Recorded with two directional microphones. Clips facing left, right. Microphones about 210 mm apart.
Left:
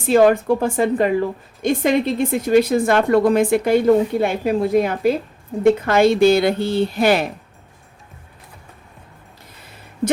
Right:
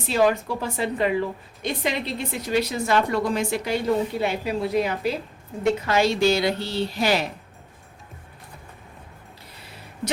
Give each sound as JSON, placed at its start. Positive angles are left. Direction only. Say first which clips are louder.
{"t": 0.1, "sound": "a woman's voice", "louder": "left 8 dB", "side_deg": 50}